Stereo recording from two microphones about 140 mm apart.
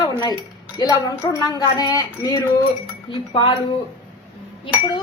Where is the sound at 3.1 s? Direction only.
35° left (ahead or behind).